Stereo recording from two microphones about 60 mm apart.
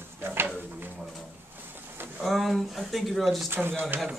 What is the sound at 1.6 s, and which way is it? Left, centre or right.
Boat, right.